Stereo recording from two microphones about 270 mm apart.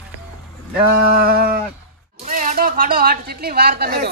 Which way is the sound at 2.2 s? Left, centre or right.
Right.